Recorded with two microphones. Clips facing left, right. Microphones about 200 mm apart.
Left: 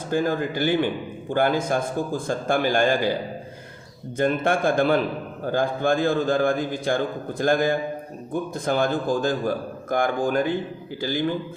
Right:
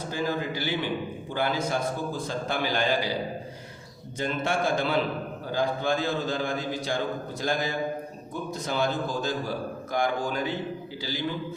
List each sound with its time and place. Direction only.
0.1 s a man's voice: 50° left (ahead or behind)
4.2 s a man's voice: 55° left (ahead or behind)